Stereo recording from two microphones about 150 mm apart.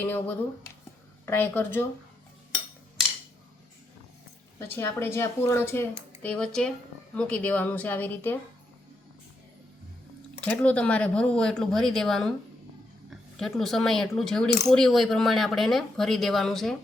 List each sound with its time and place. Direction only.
0.0 s speech: 10° left (ahead or behind)
4.6 s speech: 15° left (ahead or behind)
10.4 s speech: 10° left (ahead or behind)